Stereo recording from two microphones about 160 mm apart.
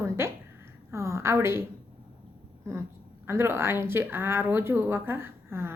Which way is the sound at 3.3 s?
15° right (ahead or behind).